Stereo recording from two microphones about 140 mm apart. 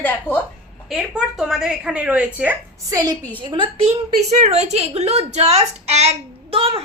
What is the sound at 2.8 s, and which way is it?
A woman's voice, 25° right (ahead or behind).